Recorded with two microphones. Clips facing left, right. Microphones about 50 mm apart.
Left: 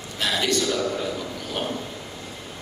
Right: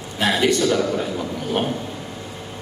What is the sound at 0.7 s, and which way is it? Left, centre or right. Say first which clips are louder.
Speech: right 4 dB; right.